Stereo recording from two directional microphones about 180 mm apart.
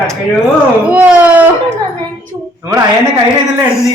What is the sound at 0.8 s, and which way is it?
Speech, 10° right (ahead or behind).